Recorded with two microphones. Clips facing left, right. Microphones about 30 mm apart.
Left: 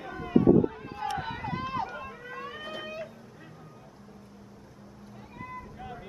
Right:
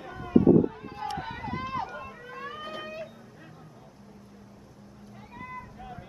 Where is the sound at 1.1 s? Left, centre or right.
Centre.